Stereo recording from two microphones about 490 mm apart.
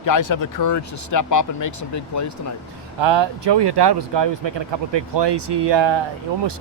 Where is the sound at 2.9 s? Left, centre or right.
Right.